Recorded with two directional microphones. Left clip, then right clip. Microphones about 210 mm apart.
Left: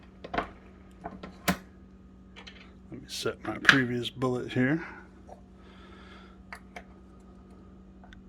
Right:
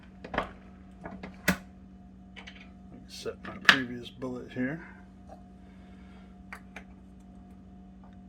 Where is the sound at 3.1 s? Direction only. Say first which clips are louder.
Left 6 dB; 50° left (ahead or behind).